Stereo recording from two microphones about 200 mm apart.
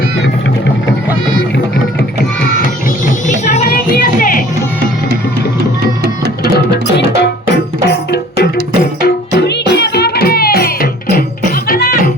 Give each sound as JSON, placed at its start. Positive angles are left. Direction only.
{"t": 3.2, "sound": "child singing", "side_deg": 35}
{"t": 3.7, "sound": "music", "side_deg": 45}
{"t": 6.4, "sound": "music", "side_deg": 55}